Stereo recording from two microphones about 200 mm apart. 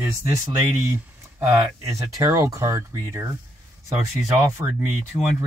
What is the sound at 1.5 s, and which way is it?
Speech, 15° right (ahead or behind).